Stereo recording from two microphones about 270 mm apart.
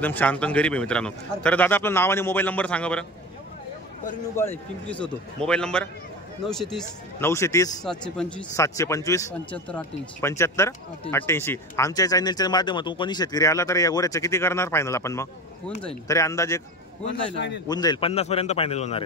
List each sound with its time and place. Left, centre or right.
0.0 s a man's voice: centre
4.4 s a man's voice: centre
17.1 s a man's voice: left
17.6 s a man's voice: centre